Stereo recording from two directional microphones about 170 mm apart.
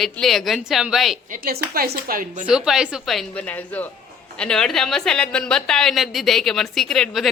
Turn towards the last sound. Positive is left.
turn(degrees=0)  # may be behind; listen again after turning